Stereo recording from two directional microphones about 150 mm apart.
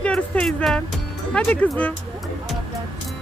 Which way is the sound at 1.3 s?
10° left (ahead or behind).